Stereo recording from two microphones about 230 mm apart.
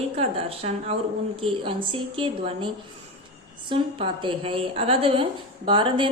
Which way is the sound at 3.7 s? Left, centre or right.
Right.